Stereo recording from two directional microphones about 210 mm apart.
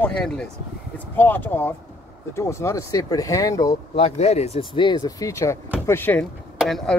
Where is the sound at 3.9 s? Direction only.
30° left (ahead or behind).